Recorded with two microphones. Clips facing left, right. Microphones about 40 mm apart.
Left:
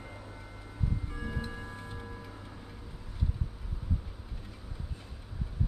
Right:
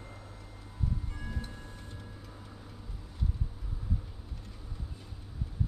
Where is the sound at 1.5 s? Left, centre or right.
Left.